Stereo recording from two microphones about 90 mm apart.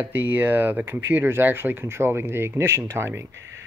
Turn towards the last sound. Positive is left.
turn(degrees=-30)  # may be behind; listen again after turning